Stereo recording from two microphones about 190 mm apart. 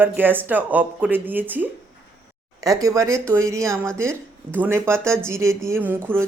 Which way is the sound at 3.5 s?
5° left (ahead or behind).